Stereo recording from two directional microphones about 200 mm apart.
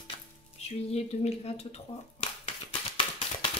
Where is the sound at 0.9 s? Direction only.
30° left (ahead or behind).